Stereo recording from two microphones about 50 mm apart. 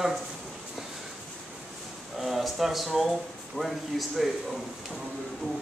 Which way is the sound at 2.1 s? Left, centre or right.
Centre.